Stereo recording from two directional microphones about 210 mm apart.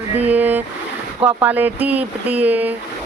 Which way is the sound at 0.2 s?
10° right (ahead or behind).